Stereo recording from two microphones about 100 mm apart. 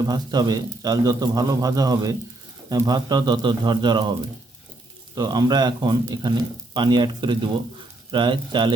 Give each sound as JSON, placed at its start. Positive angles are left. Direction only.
{"t": 0.0, "sound": "speech", "side_deg": -45}
{"t": 5.1, "sound": "speech", "side_deg": -45}